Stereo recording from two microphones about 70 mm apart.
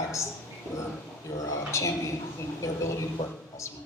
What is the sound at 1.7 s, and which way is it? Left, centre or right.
A man's voice, left.